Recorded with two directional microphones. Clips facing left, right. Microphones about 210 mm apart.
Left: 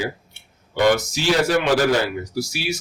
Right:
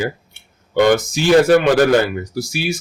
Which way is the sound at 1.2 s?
55° right (ahead or behind).